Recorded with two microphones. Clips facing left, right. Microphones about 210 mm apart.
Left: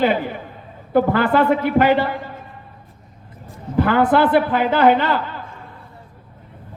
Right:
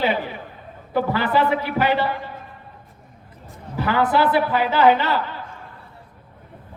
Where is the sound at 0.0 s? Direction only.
50° left (ahead or behind).